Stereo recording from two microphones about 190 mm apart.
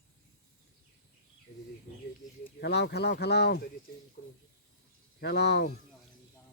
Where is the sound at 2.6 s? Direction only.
65° left (ahead or behind).